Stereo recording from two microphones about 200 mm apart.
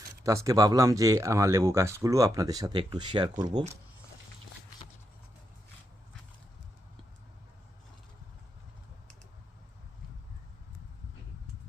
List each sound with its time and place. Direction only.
0.3 s speech: 15° right (ahead or behind)